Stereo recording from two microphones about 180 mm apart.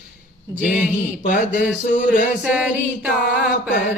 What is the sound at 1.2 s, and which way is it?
Speech, 45° left (ahead or behind).